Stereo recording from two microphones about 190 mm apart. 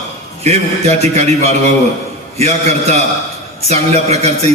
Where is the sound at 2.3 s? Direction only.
35° right (ahead or behind).